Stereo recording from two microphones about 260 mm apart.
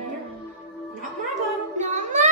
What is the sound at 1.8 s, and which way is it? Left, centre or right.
Child singing, right.